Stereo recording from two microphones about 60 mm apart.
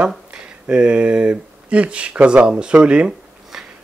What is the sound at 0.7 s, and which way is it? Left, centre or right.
Speech, centre.